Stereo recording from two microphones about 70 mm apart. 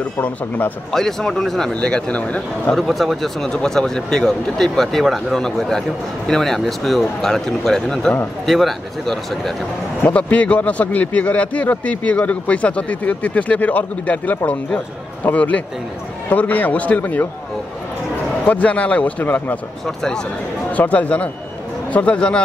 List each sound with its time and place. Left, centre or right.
0.9 s a man's voice: centre
2.7 s a man's voice: centre
10.0 s speech: left
18.4 s speech: left
20.7 s a man's voice: left